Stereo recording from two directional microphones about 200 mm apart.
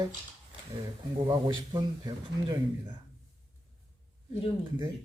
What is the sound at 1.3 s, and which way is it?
A man's voice, 20° right (ahead or behind).